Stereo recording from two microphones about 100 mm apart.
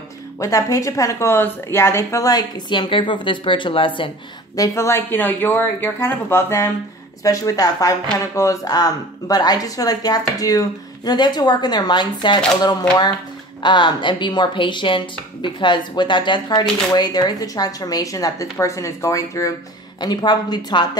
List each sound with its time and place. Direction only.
0.4 s speech: 30° left (ahead or behind); by 4.1 s 60° left (ahead or behind)
4.6 s speech: 25° left (ahead or behind)
7.2 s speech: 35° left (ahead or behind)
13.6 s speech: 50° left (ahead or behind); by 19.5 s 30° left (ahead or behind)
20.0 s speech: 45° left (ahead or behind)